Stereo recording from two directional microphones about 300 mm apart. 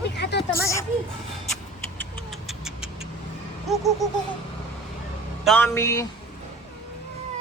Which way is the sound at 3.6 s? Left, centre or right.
Centre.